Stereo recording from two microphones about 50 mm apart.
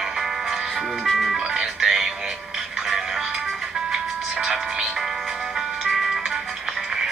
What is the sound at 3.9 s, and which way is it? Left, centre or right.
Music, centre.